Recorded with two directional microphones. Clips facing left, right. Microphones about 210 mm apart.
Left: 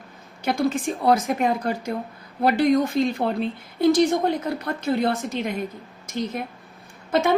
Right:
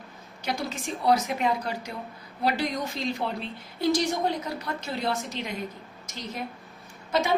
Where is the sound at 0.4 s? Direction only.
55° left (ahead or behind).